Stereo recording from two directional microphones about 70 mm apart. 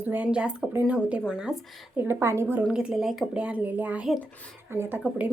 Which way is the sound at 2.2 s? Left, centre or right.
Right.